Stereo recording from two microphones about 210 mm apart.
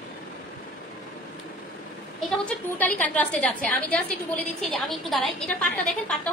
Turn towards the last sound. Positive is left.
turn(degrees=0)  # may be behind; listen again after turning